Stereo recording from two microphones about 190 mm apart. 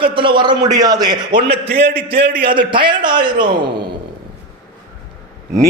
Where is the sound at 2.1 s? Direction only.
60° right (ahead or behind).